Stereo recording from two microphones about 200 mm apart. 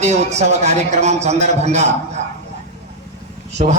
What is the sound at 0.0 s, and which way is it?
A man's voice, 35° right (ahead or behind).